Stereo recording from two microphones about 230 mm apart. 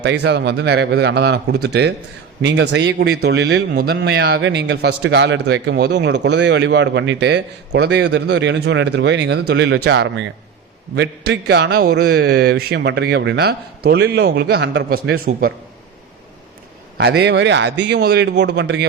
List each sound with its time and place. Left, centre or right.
0.0 s a man's voice: right
17.0 s a man's voice: right